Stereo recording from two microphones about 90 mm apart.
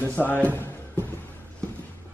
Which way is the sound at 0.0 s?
20° left (ahead or behind).